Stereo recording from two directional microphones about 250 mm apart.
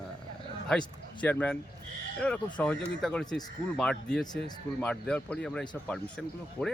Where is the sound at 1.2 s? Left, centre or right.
Centre.